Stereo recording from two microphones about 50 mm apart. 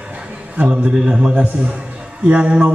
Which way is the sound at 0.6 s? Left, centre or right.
Right.